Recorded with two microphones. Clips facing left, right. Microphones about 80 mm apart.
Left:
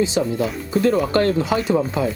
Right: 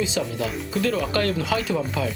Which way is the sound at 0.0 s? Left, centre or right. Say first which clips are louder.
Left 6 dB; left.